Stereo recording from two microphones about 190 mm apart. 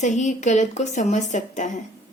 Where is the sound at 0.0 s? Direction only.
40° left (ahead or behind).